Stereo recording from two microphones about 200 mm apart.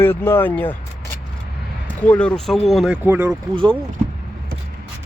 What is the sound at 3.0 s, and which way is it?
Speech, 10° right (ahead or behind).